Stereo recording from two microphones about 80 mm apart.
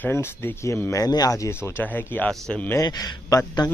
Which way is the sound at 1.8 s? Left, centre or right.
Left.